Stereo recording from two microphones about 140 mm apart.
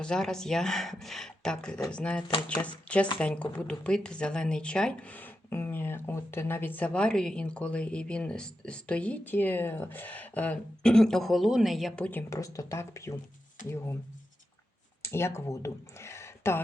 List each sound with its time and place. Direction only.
0.0 s speech: 5° left (ahead or behind)
12.3 s speech: 20° left (ahead or behind)
15.0 s speech: 20° left (ahead or behind)